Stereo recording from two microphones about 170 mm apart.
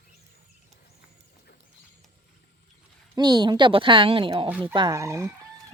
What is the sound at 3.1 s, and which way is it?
Speech, 25° right (ahead or behind).